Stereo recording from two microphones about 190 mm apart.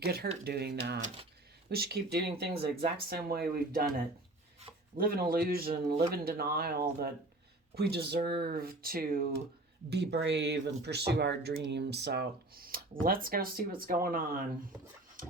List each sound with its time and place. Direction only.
0.0 s speech: 50° right (ahead or behind)
9.9 s speech: 65° right (ahead or behind); by 14.4 s 45° right (ahead or behind)
15.2 s a sound: 45° right (ahead or behind)